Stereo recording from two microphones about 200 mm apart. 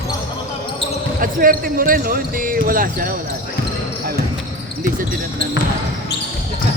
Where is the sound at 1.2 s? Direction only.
45° right (ahead or behind).